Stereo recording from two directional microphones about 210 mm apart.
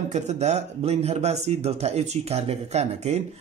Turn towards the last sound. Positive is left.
turn(degrees=-30)  # may be behind; listen again after turning